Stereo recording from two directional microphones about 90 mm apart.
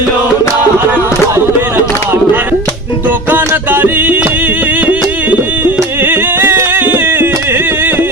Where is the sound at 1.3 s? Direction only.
30° right (ahead or behind).